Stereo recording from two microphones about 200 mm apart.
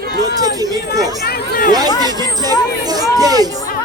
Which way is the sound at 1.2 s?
50° left (ahead or behind).